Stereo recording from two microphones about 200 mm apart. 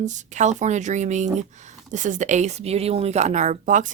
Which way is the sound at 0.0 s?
35° right (ahead or behind).